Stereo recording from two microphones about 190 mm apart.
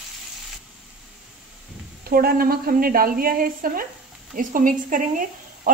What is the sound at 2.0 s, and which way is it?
A woman's voice, 50° right (ahead or behind).